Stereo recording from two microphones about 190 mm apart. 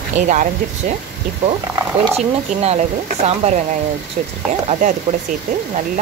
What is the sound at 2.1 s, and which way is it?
Speech, 35° right (ahead or behind).